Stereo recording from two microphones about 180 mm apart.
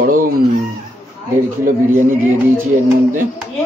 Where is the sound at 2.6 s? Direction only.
45° right (ahead or behind).